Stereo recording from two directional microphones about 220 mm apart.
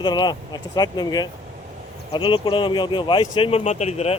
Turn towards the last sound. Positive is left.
turn(degrees=30)  # may be behind; listen again after turning